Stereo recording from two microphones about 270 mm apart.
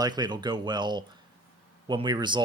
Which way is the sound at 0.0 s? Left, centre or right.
Centre.